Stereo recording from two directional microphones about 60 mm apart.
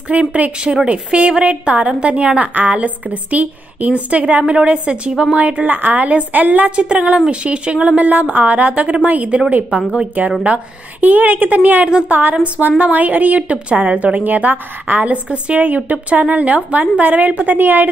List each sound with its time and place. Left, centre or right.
0.1 s a woman's voice: right